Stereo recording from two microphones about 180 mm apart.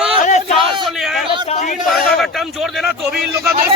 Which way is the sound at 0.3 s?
40° left (ahead or behind).